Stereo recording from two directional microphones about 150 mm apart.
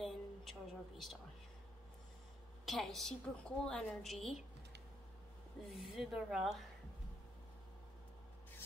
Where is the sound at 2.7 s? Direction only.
Centre (ahead or behind).